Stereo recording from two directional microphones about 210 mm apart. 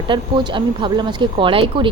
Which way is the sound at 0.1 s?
20° right (ahead or behind).